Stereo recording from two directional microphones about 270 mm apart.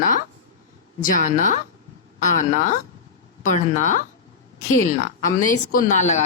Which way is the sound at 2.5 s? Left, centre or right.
Left.